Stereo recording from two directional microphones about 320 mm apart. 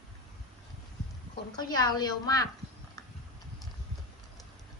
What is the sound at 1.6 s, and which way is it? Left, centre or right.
Speech, centre.